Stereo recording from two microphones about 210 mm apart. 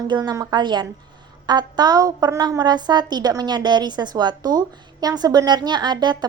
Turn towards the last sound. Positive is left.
turn(degrees=-20)  # may be behind; listen again after turning